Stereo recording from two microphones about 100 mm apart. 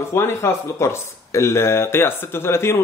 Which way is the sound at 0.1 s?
25° left (ahead or behind).